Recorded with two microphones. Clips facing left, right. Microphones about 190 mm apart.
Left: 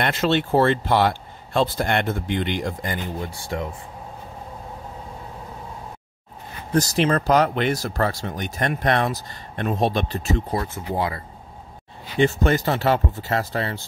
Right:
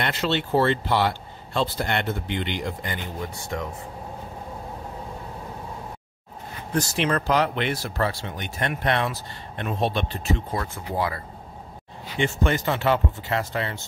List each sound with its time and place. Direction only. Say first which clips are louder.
0.0 s speech: left 4 dB; 50° left (ahead or behind); by 3.6 s 30° left (ahead or behind)
6.7 s speech: left 4 dB; 35° left (ahead or behind)
10.6 s speech: left 2 dB; 25° left (ahead or behind)
12.2 s speech: left 5 dB; 40° left (ahead or behind)